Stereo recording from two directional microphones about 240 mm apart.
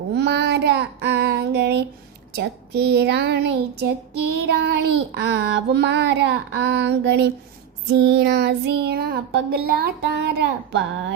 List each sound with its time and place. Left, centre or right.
0.1 s child singing: right